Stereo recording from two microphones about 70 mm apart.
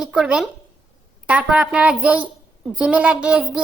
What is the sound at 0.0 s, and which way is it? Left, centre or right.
A child's voice, centre.